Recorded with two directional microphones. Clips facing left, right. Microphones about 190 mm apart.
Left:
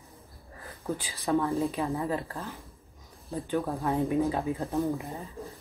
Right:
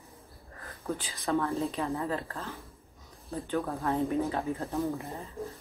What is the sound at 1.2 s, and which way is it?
Speech, 15° left (ahead or behind).